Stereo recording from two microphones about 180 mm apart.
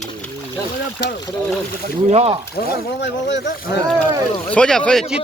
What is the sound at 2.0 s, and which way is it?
Speech, 35° right (ahead or behind).